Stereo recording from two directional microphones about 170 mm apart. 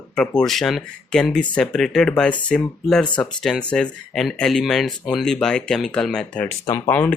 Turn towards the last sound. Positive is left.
turn(degrees=10)  # may be behind; listen again after turning